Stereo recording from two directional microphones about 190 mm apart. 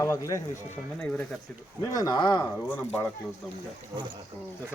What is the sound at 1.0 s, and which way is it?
Speech, 5° left (ahead or behind).